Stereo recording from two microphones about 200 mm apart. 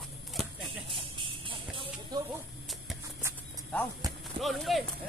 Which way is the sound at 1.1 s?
25° right (ahead or behind).